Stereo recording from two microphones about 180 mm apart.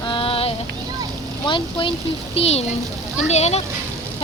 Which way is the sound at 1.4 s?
30° left (ahead or behind).